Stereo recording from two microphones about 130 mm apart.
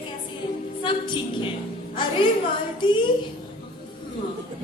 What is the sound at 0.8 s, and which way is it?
Speech, 40° left (ahead or behind).